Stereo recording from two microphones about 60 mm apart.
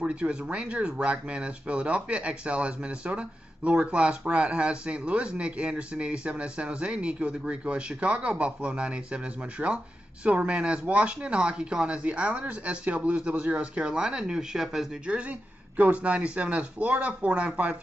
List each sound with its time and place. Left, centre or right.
0.0 s speech: centre
15.0 s speech: centre